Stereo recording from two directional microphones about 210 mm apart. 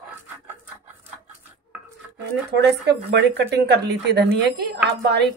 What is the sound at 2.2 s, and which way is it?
Speech, 55° right (ahead or behind).